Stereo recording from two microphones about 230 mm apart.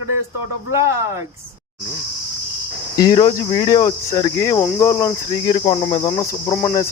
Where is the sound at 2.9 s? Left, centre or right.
Centre.